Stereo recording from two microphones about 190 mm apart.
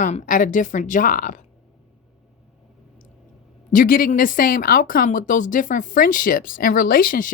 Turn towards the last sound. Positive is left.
turn(degrees=45)  # may be behind; listen again after turning